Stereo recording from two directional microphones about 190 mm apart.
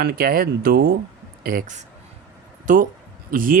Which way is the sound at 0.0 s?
50° right (ahead or behind).